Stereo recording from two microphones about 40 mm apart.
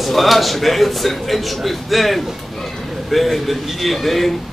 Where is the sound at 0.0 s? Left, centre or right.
Centre.